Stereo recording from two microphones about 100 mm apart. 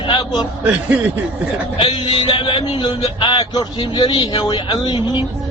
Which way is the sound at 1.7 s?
65° left (ahead or behind).